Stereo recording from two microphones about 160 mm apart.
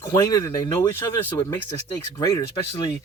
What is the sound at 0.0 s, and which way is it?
A man's voice, 20° left (ahead or behind).